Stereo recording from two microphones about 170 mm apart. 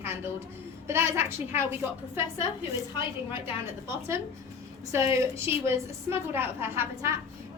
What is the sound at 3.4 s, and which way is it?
A woman's voice, 15° right (ahead or behind).